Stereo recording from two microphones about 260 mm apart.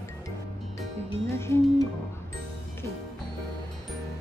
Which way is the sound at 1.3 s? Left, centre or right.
Centre.